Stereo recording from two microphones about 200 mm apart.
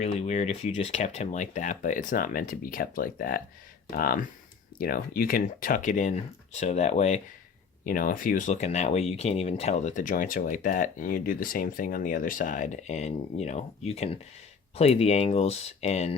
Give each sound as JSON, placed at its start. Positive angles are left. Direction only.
{"t": 0.0, "sound": "speech", "side_deg": 35}